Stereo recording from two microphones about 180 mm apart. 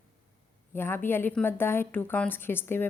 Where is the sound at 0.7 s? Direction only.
15° left (ahead or behind).